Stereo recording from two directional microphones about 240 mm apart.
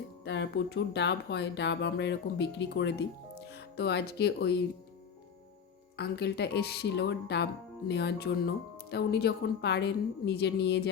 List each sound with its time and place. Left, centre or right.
0.3 s speech: left
6.0 s speech: left